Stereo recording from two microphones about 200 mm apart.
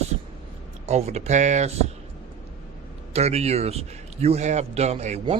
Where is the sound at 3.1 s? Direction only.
30° right (ahead or behind).